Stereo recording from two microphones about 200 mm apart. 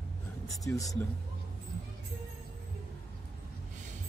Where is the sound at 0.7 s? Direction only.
15° left (ahead or behind).